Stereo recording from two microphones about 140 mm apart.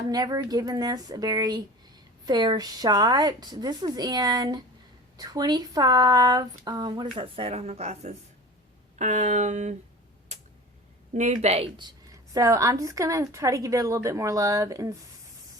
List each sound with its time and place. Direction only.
0.1 s a woman's voice: 30° right (ahead or behind); by 9.7 s 55° right (ahead or behind)
11.1 s speech: 60° right (ahead or behind)
12.3 s a woman's voice: 25° right (ahead or behind)